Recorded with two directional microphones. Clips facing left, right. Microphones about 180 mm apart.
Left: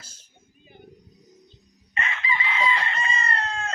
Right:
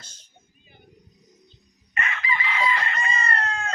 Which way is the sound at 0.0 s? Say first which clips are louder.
Even; 5° left (ahead or behind).